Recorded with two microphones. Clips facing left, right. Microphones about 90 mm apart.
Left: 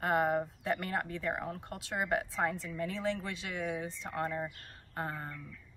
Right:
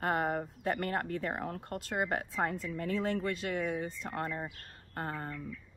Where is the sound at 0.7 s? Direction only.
50° right (ahead or behind).